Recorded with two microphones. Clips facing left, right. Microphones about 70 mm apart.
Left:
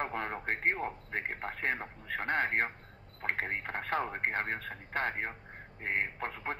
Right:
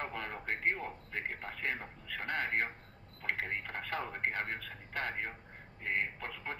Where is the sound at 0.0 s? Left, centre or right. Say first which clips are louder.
Left 5 dB; left.